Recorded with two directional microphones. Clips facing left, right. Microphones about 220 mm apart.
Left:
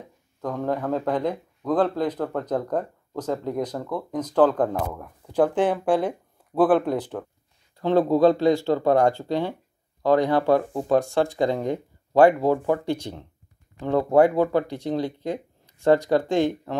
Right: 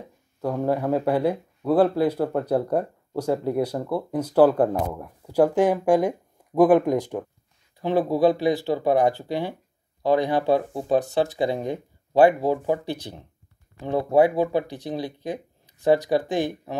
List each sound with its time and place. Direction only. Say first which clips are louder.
0.4 s speech: right 3 dB; 10° right (ahead or behind)